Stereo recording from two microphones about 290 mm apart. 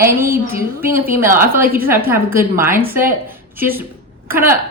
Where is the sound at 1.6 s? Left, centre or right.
Right.